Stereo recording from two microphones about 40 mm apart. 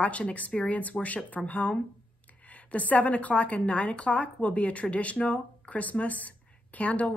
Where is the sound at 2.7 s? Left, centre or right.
Left.